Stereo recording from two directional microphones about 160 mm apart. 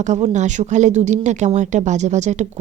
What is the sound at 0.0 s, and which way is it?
Speech, 50° right (ahead or behind).